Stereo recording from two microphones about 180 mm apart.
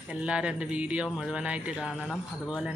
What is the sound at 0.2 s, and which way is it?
Speech, 5° right (ahead or behind).